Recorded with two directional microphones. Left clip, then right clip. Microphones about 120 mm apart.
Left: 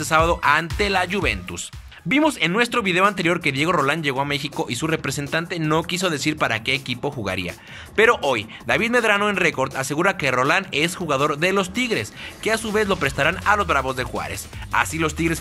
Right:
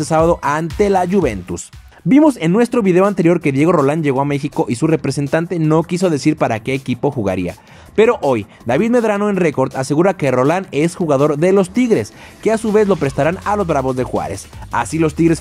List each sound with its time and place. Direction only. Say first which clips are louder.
0.0 s speech: right 4 dB; 50° right (ahead or behind)